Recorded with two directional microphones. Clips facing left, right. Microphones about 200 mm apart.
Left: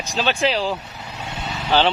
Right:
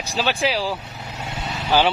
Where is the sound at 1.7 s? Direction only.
10° right (ahead or behind).